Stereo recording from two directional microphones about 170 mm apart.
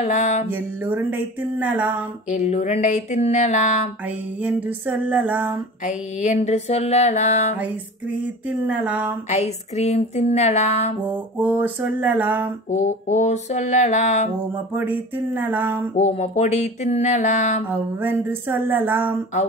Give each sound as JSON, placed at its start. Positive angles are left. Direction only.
{"t": 0.0, "sound": "a sound", "side_deg": 45}
{"t": 0.5, "sound": "music", "side_deg": -10}
{"t": 2.2, "sound": "a sound", "side_deg": 45}
{"t": 4.4, "sound": "music", "side_deg": -10}
{"t": 6.1, "sound": "music", "side_deg": 45}
{"t": 7.5, "sound": "music", "side_deg": -10}
{"t": 9.3, "sound": "music", "side_deg": 40}
{"t": 11.1, "sound": "music", "side_deg": -10}
{"t": 12.6, "sound": "a sound", "side_deg": 45}
{"t": 14.7, "sound": "music", "side_deg": -10}
{"t": 16.0, "sound": "music", "side_deg": 40}
{"t": 17.6, "sound": "music", "side_deg": -10}